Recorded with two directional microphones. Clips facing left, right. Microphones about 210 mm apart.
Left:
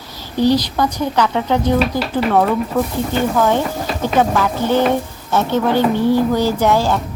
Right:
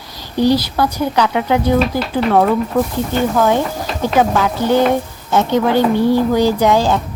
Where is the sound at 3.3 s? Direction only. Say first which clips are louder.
Right 1 dB; 5° right (ahead or behind).